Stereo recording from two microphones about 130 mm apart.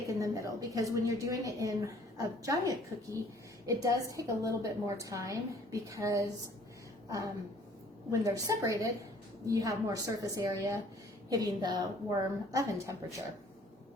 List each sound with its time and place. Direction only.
0.1 s a woman's voice: 25° right (ahead or behind)
8.1 s a woman's voice: 25° right (ahead or behind)